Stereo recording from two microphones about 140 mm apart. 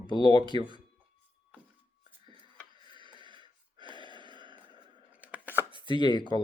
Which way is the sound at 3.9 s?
35° right (ahead or behind).